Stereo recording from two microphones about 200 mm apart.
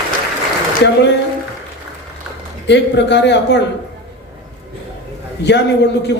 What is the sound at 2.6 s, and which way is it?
Speech, 60° left (ahead or behind).